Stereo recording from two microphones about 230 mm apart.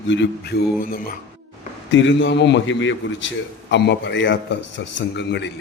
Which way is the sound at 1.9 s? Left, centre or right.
Left.